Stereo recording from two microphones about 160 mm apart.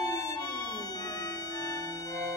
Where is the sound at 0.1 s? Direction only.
25° left (ahead or behind).